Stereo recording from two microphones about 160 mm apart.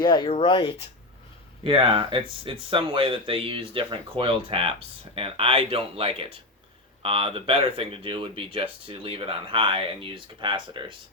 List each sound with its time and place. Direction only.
0.0 s speech: 25° left (ahead or behind)
1.6 s speech: 30° right (ahead or behind)